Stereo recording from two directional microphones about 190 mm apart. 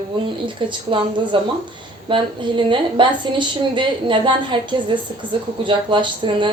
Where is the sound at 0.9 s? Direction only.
25° right (ahead or behind).